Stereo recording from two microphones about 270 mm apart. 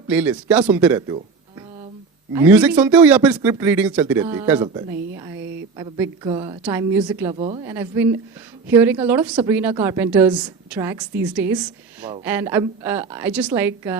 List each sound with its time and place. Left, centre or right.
0.1 s speech: centre
2.3 s speech: centre
6.6 s speech: centre
7.3 s a woman's voice: right